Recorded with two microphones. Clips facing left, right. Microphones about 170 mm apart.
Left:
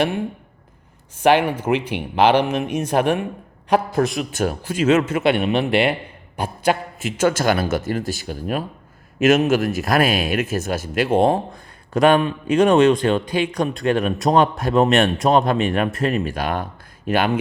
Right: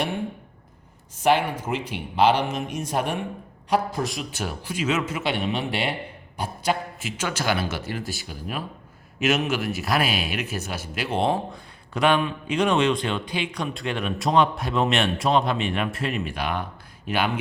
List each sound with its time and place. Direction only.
1.2 s a man's voice: 70° left (ahead or behind); by 17.3 s 45° left (ahead or behind)